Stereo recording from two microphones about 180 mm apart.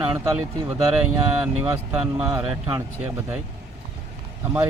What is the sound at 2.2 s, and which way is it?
Speech, 25° right (ahead or behind).